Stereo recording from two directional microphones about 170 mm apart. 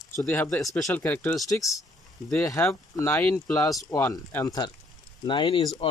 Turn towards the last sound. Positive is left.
turn(degrees=30)  # may be behind; listen again after turning